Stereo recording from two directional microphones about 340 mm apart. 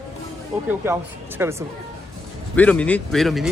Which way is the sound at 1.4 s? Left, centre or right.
Centre.